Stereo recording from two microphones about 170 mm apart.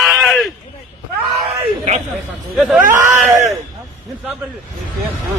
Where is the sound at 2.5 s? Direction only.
5° right (ahead or behind).